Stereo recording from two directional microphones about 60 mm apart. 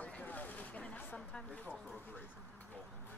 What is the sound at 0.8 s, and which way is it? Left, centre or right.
Speech, left.